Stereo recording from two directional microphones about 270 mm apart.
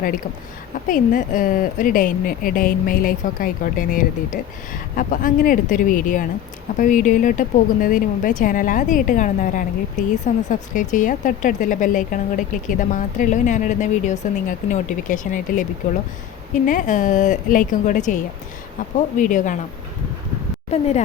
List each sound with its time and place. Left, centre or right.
0.9 s a woman's voice: left
16.6 s a woman's voice: left
20.7 s a woman's voice: left